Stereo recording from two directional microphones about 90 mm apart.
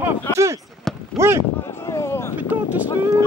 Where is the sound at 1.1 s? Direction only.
30° right (ahead or behind).